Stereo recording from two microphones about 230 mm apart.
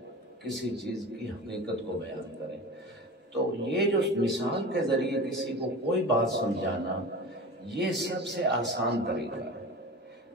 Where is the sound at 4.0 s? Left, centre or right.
Right.